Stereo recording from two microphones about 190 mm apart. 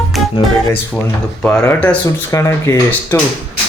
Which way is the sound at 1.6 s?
10° left (ahead or behind).